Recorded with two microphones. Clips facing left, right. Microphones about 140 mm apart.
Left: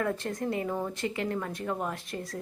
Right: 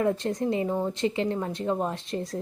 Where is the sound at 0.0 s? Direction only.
20° right (ahead or behind).